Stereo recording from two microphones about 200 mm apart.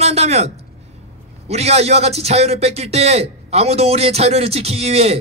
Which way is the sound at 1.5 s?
30° right (ahead or behind).